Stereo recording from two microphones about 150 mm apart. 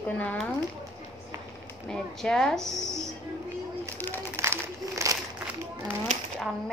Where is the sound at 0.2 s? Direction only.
10° left (ahead or behind).